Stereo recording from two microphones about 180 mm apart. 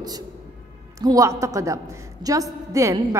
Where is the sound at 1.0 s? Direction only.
20° right (ahead or behind).